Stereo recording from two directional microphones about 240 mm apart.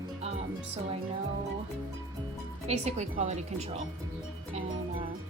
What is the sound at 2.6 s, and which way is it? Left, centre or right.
Speech, right.